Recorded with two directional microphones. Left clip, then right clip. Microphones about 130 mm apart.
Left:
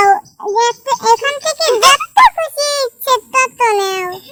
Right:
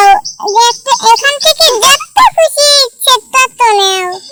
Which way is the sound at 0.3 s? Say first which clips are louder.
Right 6 dB; 45° right (ahead or behind).